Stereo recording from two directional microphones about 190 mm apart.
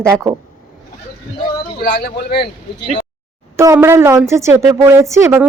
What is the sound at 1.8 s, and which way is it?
Speech, 55° left (ahead or behind).